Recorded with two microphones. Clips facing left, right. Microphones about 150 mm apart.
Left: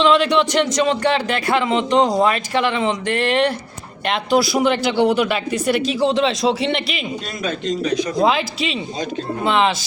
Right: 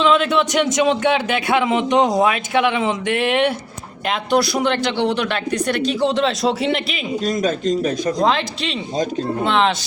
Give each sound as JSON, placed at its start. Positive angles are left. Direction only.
{"t": 0.0, "sound": "a man's voice", "side_deg": 0}
{"t": 7.4, "sound": "speech", "side_deg": -45}
{"t": 8.2, "sound": "a man's voice", "side_deg": 5}